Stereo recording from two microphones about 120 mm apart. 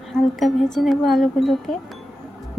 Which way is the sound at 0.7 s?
Centre (ahead or behind).